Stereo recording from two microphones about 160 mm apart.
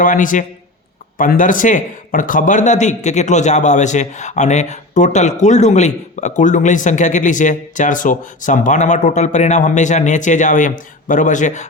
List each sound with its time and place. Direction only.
0.0 s a man's voice: 55° left (ahead or behind)